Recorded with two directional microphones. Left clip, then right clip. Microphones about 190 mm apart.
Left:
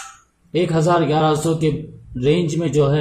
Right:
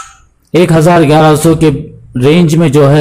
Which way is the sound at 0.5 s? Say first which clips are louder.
Right 10 dB; 35° right (ahead or behind).